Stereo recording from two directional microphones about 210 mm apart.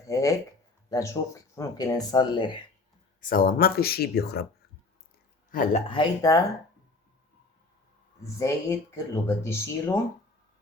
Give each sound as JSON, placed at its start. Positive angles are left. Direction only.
{"t": 0.1, "sound": "speech", "side_deg": 15}
{"t": 3.2, "sound": "speech", "side_deg": 40}
{"t": 5.5, "sound": "speech", "side_deg": 40}
{"t": 5.9, "sound": "speech", "side_deg": 20}
{"t": 8.4, "sound": "speech", "side_deg": 15}